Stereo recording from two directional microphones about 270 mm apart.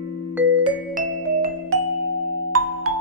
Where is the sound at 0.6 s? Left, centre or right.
Right.